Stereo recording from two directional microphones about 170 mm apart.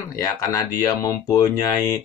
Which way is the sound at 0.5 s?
15° left (ahead or behind).